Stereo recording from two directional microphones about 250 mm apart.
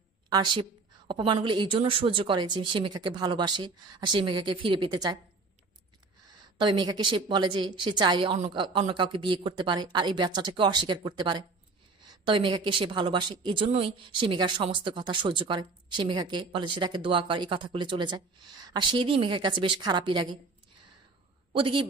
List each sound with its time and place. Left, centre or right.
0.3 s a woman's voice: centre
6.6 s a woman's voice: centre
21.5 s a woman's voice: right